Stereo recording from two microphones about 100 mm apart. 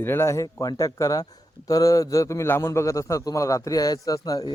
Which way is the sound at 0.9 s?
35° left (ahead or behind).